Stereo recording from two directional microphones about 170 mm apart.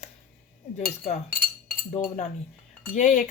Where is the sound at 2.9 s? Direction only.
45° left (ahead or behind).